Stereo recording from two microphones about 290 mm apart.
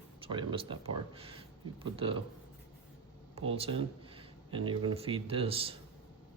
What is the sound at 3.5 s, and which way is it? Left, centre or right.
Speech, centre.